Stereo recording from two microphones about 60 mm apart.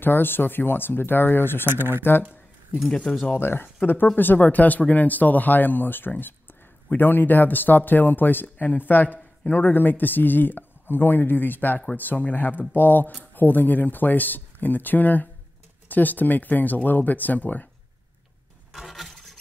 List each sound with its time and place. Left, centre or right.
0.0 s speech: left
1.7 s speech: right
3.3 s speech: left
18.7 s a sound: centre